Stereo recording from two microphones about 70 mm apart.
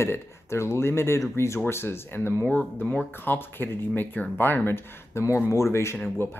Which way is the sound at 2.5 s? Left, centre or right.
Left.